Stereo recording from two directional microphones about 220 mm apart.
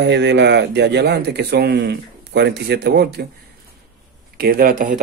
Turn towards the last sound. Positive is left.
turn(degrees=-40)  # may be behind; listen again after turning